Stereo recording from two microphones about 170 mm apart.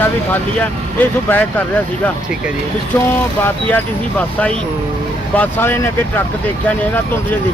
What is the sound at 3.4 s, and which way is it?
Speech, 10° left (ahead or behind).